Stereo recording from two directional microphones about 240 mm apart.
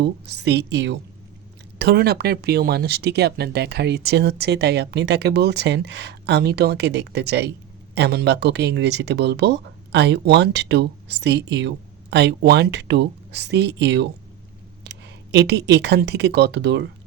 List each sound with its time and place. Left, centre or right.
0.0 s speech: right